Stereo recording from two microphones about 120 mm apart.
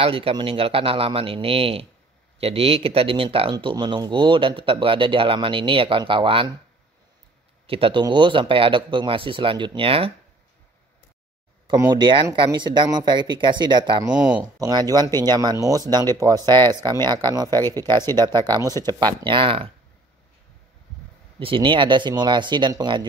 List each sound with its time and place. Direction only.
0.0 s speech: 50° right (ahead or behind)
3.5 s speech: 35° right (ahead or behind)
7.6 s speech: 50° right (ahead or behind)
11.9 s speech: 40° right (ahead or behind)
21.4 s speech: 45° right (ahead or behind)